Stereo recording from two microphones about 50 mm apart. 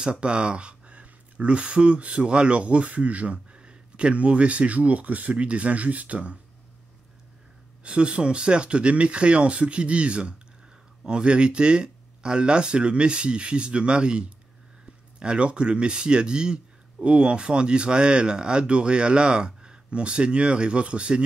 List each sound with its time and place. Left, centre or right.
0.0 s speech: centre
7.8 s speech: right